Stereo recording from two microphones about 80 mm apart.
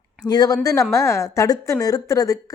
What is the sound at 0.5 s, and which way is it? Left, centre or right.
A woman's voice, left.